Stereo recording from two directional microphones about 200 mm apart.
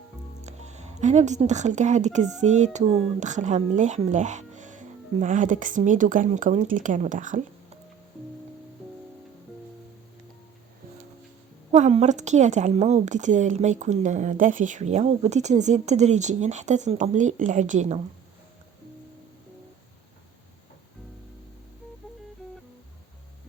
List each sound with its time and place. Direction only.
0.4 s a woman's voice: 35° right (ahead or behind)
11.7 s a woman's voice: 35° right (ahead or behind)